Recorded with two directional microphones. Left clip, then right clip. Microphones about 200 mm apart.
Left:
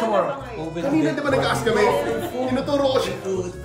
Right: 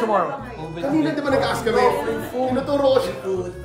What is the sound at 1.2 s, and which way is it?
Speech, centre (ahead or behind).